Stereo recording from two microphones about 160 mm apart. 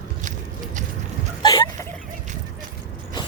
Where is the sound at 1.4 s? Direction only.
25° left (ahead or behind).